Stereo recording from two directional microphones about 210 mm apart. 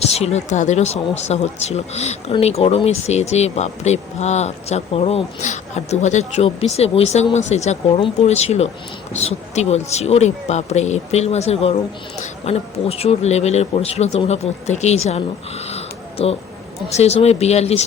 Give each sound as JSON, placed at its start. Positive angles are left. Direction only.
{"t": 0.0, "sound": "speech", "side_deg": 30}
{"t": 15.7, "sound": "a sound", "side_deg": 30}
{"t": 16.9, "sound": "speech", "side_deg": 30}